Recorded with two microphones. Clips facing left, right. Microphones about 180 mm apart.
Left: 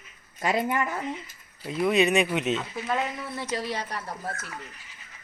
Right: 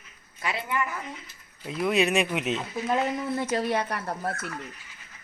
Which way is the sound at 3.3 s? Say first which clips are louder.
Right 4 dB; 55° right (ahead or behind).